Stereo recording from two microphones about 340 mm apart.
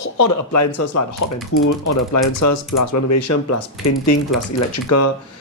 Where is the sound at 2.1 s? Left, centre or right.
Left.